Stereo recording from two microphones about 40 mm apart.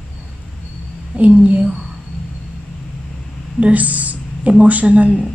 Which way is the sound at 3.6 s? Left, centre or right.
Right.